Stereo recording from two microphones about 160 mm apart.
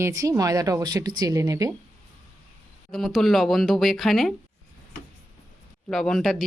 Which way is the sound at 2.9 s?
Centre (ahead or behind).